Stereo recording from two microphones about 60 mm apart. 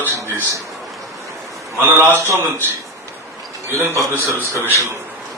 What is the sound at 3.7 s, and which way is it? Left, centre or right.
Speech, right.